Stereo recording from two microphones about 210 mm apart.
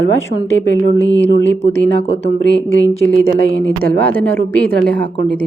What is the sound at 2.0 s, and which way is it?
Speech, 25° left (ahead or behind).